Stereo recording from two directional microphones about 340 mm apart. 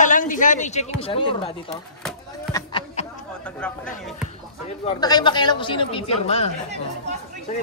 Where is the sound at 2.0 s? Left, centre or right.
Centre.